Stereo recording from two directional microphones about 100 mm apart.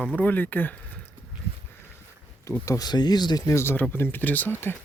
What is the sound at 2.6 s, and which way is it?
Speech, 40° left (ahead or behind).